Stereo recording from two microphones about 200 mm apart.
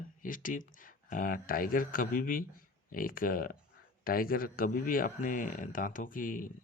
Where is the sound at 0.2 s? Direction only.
40° left (ahead or behind).